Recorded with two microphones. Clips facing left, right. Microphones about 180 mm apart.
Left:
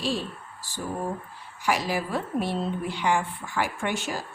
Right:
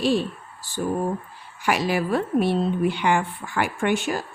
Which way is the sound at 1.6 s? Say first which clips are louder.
Right 4 dB; 65° right (ahead or behind).